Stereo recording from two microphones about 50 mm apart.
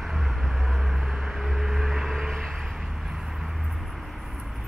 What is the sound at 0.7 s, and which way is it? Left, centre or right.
Vehicle, centre.